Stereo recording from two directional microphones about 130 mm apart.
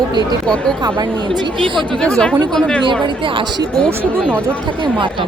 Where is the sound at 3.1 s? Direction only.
40° right (ahead or behind).